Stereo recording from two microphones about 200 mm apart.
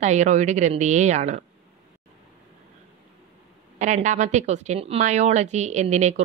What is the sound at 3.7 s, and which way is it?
A woman's voice, 35° right (ahead or behind).